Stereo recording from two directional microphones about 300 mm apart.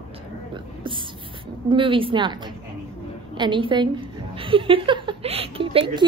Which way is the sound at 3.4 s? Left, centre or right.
Centre.